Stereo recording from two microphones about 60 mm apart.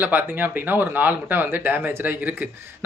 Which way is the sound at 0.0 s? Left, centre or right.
Right.